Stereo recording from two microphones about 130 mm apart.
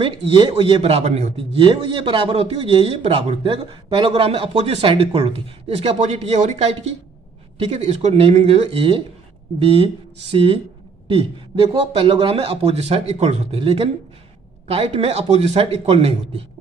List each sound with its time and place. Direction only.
0.0 s a man's voice: 40° right (ahead or behind)
1.0 s a man's voice: 55° right (ahead or behind)